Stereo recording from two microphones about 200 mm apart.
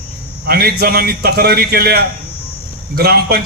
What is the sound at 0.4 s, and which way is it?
A man's voice, 50° right (ahead or behind).